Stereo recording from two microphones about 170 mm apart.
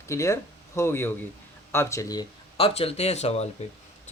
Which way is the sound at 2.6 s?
35° left (ahead or behind).